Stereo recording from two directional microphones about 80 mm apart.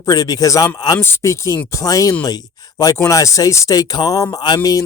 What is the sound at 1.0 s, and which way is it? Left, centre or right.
Speech, left.